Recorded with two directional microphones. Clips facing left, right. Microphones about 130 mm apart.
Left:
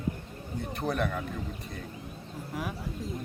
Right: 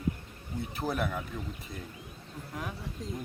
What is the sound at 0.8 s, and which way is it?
Speech, 5° right (ahead or behind).